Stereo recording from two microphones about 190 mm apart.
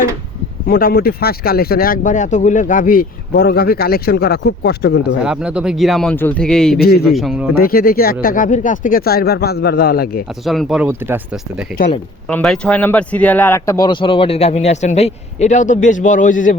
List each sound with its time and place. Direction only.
0.7 s speech: 50° left (ahead or behind)
5.2 s a man's voice: 5° right (ahead or behind)
6.7 s a man's voice: 55° left (ahead or behind)
7.1 s a man's voice: centre (ahead or behind)
7.6 s speech: 50° left (ahead or behind)
10.4 s a man's voice: centre (ahead or behind)
12.3 s speech: 5° left (ahead or behind); by 16.6 s 45° left (ahead or behind)